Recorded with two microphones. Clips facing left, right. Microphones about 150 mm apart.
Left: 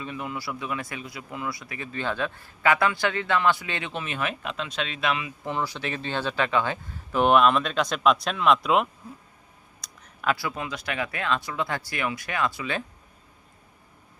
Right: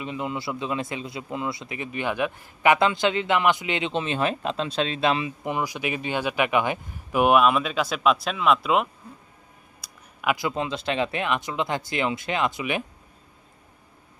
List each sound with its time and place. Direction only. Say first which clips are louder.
0.0 s speech: right 3 dB; 20° right (ahead or behind)
5.4 s speech: right 2 dB; 15° right (ahead or behind)